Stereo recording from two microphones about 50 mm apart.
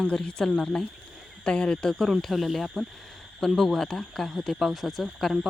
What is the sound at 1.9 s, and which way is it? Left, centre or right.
Speech, centre.